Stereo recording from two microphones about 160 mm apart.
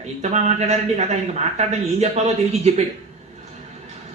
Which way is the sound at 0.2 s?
40° right (ahead or behind).